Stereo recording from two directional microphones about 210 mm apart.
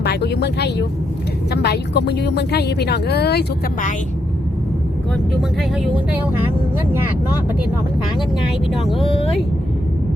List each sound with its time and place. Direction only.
0.0 s speech: 50° left (ahead or behind)
5.1 s speech: centre (ahead or behind)